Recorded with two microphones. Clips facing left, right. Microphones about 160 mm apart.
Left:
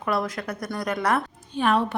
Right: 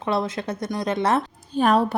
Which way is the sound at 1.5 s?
40° right (ahead or behind).